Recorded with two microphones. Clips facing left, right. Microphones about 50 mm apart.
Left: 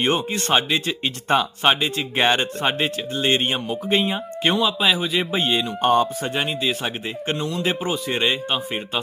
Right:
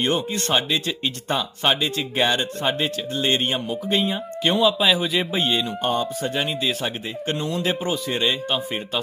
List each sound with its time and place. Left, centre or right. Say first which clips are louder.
0.0 s speech: left 1 dB; left
0.5 s speech: left 2 dB; centre
2.1 s speech: left 3 dB; left; by 4.5 s centre
4.5 s a man's voice: right 3 dB; centre
5.8 s speech: left 8 dB; left
6.3 s speech: left 1 dB; centre
7.3 s a man's voice: even; centre
7.6 s speech: left 1 dB; centre
8.0 s speech: left 3 dB; left